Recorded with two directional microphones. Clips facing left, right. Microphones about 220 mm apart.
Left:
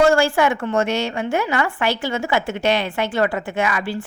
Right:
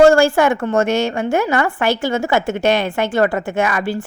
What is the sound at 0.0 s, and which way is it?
A woman's voice, 45° right (ahead or behind).